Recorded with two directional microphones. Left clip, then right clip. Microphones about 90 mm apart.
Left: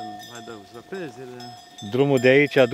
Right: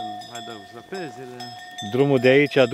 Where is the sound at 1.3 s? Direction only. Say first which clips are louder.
Right 4 dB; 25° right (ahead or behind).